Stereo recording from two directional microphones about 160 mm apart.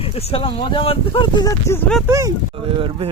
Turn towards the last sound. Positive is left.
turn(degrees=-35)  # may be behind; listen again after turning